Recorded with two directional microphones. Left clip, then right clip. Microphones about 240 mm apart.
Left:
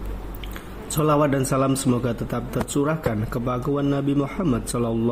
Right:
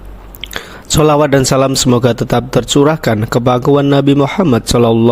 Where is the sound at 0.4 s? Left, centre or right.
Right.